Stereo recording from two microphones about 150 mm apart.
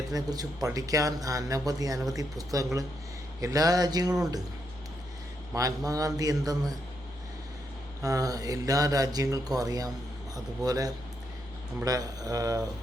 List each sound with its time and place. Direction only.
0.1 s mantra: 25° right (ahead or behind)
5.5 s mantra: 25° right (ahead or behind)
8.0 s mantra: 25° right (ahead or behind)